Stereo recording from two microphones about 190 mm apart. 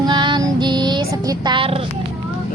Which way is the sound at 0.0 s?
25° right (ahead or behind).